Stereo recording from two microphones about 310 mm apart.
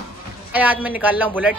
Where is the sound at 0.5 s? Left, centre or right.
Centre.